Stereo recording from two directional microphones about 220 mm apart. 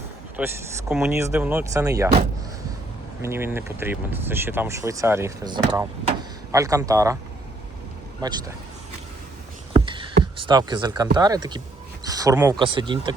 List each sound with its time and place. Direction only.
0.3 s speech: 5° right (ahead or behind)
3.2 s speech: 10° right (ahead or behind)
8.2 s speech: 15° right (ahead or behind)
9.8 s beatboxing: 20° right (ahead or behind)
10.3 s speech: 20° right (ahead or behind)